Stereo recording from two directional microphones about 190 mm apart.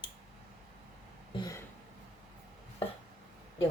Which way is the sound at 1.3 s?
20° left (ahead or behind).